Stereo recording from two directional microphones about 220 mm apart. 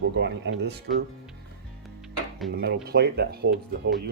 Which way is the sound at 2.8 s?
50° right (ahead or behind).